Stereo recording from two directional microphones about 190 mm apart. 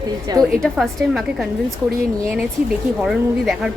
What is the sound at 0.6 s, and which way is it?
Speech, centre (ahead or behind).